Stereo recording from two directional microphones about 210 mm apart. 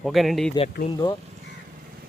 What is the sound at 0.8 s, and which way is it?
Speech, 20° left (ahead or behind).